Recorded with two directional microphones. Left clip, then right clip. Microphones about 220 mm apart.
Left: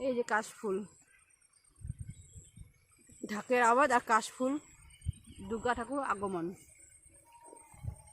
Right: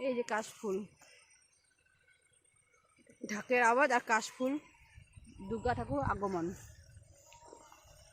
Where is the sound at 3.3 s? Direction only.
15° left (ahead or behind); by 6.4 s centre (ahead or behind).